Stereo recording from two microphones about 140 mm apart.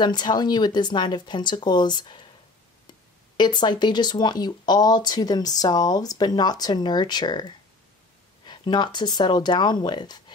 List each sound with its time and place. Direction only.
0.0 s speech: 30° left (ahead or behind)
3.3 s speech: 30° left (ahead or behind)